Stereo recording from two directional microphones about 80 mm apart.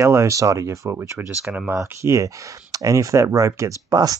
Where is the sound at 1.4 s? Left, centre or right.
Centre.